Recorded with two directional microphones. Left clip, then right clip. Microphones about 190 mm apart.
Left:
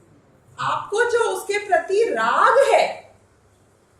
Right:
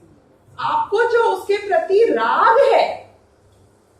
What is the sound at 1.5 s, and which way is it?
A woman's voice, 35° left (ahead or behind).